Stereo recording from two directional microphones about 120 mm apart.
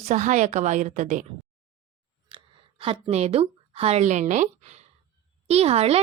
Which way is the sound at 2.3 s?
50° right (ahead or behind).